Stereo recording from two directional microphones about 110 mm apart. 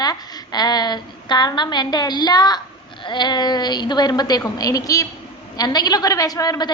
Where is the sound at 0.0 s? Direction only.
35° left (ahead or behind).